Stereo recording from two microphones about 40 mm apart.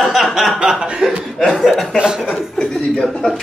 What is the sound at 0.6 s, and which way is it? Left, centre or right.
Chuckle, right.